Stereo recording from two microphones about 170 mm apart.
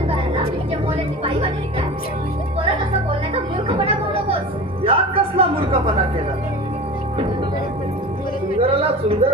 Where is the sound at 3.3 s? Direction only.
35° right (ahead or behind).